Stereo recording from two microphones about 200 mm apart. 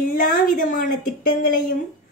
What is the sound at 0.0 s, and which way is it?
A woman's voice, 45° left (ahead or behind).